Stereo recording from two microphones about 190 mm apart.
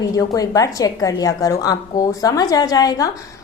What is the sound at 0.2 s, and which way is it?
A woman's voice, 15° left (ahead or behind).